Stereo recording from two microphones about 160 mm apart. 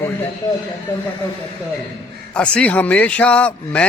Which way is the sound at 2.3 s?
10° left (ahead or behind).